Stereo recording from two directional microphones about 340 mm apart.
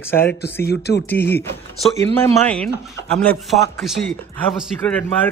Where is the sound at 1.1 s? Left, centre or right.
Centre.